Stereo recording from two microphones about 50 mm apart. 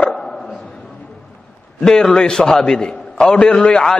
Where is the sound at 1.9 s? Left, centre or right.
Centre.